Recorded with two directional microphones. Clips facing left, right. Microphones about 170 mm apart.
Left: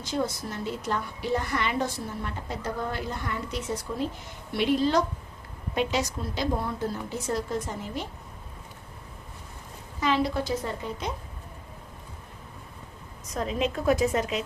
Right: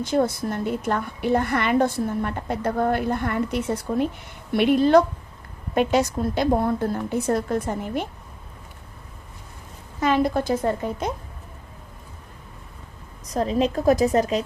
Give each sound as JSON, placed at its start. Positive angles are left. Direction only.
{"t": 0.0, "sound": "a woman's voice", "side_deg": -55}
{"t": 10.0, "sound": "a woman's voice", "side_deg": -50}
{"t": 13.2, "sound": "a woman's voice", "side_deg": -35}